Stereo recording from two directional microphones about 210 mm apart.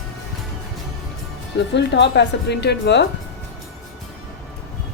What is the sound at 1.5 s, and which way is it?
Speech, 55° left (ahead or behind).